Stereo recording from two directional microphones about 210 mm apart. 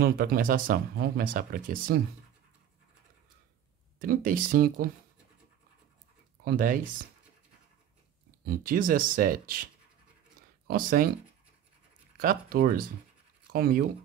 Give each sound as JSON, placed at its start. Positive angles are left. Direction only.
{"t": 0.0, "sound": "speech", "side_deg": -45}
{"t": 4.0, "sound": "speech", "side_deg": -40}
{"t": 6.4, "sound": "speech", "side_deg": -40}
{"t": 8.5, "sound": "speech", "side_deg": -40}
{"t": 10.7, "sound": "speech", "side_deg": -40}
{"t": 12.2, "sound": "speech", "side_deg": -45}